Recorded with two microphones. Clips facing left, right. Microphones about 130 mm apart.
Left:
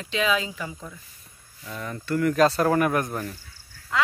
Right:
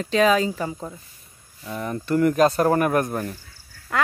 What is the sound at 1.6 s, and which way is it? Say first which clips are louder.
Speech: right 5 dB; 25° right (ahead or behind).